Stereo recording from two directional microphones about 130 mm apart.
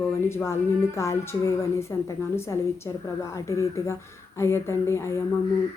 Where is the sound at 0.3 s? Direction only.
20° left (ahead or behind).